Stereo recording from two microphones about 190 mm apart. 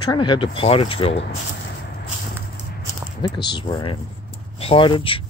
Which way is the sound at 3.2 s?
20° left (ahead or behind).